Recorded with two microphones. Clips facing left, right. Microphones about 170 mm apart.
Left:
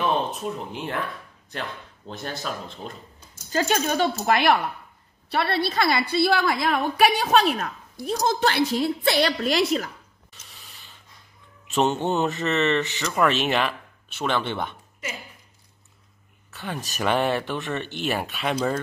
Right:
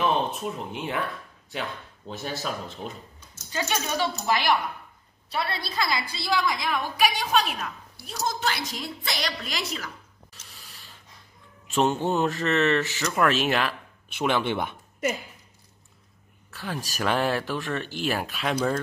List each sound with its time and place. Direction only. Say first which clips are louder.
0.0 s speech: left 1 dB; centre (ahead or behind)
3.5 s a woman's voice: left 5 dB; 55° left (ahead or behind)
9.1 s a woman's voice: left 7 dB; 40° left (ahead or behind)
10.3 s a sound: left 1 dB; centre (ahead or behind)
11.6 s speech: left 1 dB; centre (ahead or behind)
14.0 s speech: right 1 dB; 10° right (ahead or behind)
16.4 s speech: left 1 dB; centre (ahead or behind)